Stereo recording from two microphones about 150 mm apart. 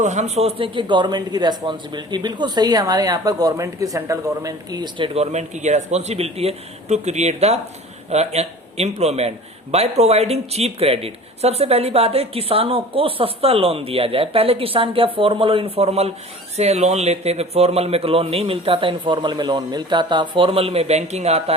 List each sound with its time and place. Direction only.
0.0 s a man's voice: 50° right (ahead or behind)